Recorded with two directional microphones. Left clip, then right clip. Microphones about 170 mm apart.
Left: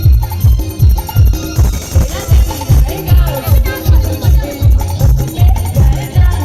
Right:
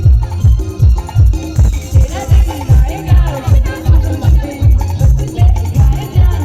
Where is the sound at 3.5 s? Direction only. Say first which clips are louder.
Left 3 dB; 20° right (ahead or behind).